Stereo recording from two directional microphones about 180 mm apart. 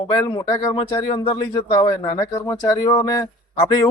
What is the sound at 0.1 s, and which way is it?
Speech, 20° left (ahead or behind).